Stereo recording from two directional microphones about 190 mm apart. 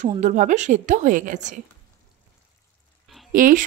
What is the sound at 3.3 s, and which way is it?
Speech, 45° right (ahead or behind).